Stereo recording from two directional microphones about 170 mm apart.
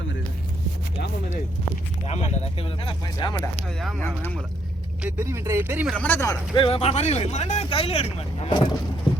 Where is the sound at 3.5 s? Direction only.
Centre (ahead or behind).